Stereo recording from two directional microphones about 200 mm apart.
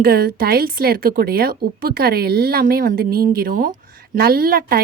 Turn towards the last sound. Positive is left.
turn(degrees=-45)  # may be behind; listen again after turning